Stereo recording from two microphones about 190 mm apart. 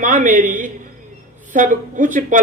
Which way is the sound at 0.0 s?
40° right (ahead or behind).